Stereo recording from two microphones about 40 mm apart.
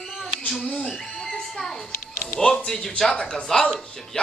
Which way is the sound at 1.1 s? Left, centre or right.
Centre.